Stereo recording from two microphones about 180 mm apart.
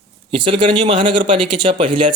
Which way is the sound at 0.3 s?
30° right (ahead or behind).